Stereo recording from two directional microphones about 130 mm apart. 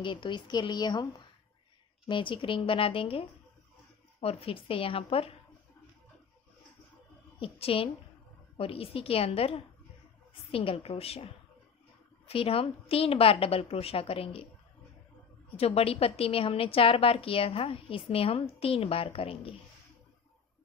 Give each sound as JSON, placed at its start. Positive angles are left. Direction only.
{"t": 0.0, "sound": "a woman's voice", "side_deg": 40}
{"t": 2.0, "sound": "a woman's voice", "side_deg": 40}
{"t": 7.3, "sound": "a woman's voice", "side_deg": 45}
{"t": 15.5, "sound": "a woman's voice", "side_deg": 50}